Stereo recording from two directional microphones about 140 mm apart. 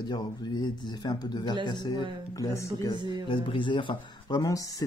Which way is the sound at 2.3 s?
20° left (ahead or behind).